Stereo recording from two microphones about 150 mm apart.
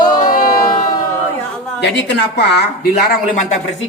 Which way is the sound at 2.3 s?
90° left.